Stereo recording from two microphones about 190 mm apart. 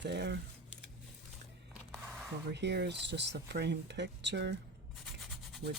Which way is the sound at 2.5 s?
65° right (ahead or behind).